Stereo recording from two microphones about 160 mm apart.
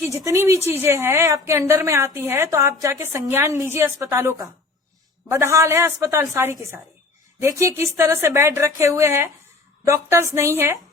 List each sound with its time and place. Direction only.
0.3 s a woman's voice: 20° right (ahead or behind)